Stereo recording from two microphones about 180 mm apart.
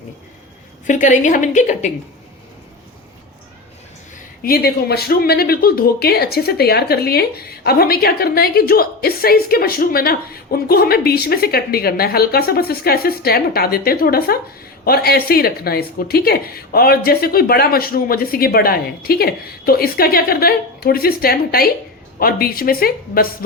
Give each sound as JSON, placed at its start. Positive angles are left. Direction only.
{"t": 0.9, "sound": "a woman's voice", "side_deg": 45}
{"t": 4.4, "sound": "speech", "side_deg": 60}